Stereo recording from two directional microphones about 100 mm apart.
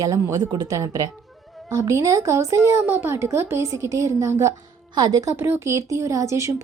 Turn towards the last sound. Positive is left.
turn(degrees=-30)  # may be behind; listen again after turning